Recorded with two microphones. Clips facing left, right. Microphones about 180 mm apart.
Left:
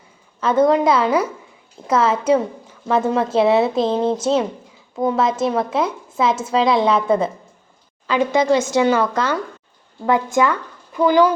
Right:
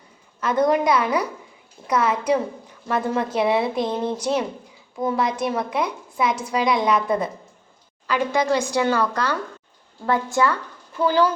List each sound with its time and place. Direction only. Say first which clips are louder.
0.4 s a woman's voice: left 4 dB; 25° left (ahead or behind)